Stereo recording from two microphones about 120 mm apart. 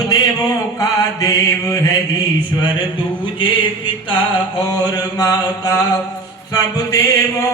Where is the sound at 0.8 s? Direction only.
30° left (ahead or behind).